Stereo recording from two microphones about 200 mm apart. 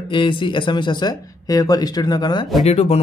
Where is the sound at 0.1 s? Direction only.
25° left (ahead or behind).